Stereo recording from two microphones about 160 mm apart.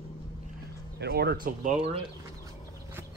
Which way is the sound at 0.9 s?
90° right.